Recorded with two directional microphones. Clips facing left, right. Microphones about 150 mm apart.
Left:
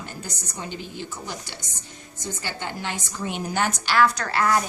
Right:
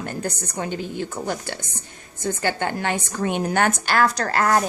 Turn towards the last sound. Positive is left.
turn(degrees=-45)  # may be behind; listen again after turning